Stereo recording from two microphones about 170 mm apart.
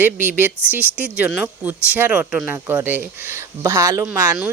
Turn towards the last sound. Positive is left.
turn(degrees=-15)  # may be behind; listen again after turning